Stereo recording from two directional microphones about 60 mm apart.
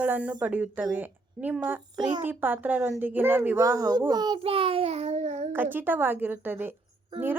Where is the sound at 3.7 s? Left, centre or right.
Right.